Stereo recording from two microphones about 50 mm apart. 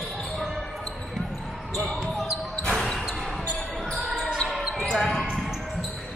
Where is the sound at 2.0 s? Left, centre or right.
Centre.